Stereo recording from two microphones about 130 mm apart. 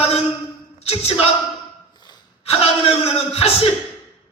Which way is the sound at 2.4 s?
50° left (ahead or behind).